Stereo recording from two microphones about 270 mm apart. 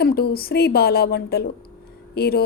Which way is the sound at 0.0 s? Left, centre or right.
Left.